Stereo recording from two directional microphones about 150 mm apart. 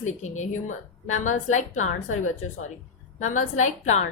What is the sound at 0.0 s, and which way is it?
A woman's voice, 55° left (ahead or behind).